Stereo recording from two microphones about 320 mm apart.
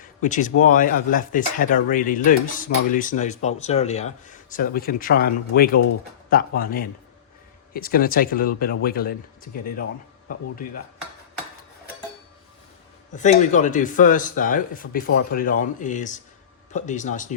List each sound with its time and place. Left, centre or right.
0.2 s speech: left
13.1 s speech: left